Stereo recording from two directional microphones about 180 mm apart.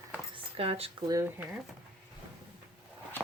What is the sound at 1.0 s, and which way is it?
Speech, 15° right (ahead or behind).